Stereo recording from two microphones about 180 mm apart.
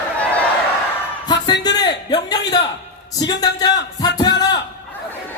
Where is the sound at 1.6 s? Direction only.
20° left (ahead or behind).